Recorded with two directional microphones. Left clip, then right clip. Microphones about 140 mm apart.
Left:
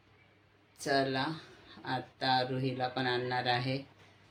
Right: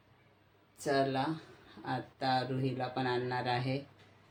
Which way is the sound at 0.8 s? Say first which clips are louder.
Even; 15° right (ahead or behind).